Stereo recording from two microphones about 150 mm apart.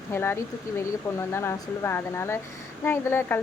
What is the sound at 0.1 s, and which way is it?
Speech, 15° left (ahead or behind).